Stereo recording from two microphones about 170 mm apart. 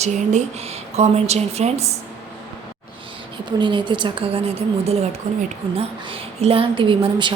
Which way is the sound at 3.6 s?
30° right (ahead or behind).